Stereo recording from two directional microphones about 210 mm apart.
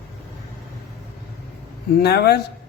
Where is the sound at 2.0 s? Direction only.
50° left (ahead or behind).